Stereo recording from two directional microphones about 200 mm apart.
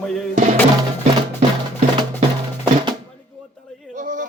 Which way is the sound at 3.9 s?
40° right (ahead or behind).